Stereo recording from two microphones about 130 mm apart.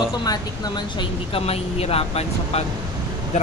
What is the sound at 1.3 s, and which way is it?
Speech, 50° left (ahead or behind).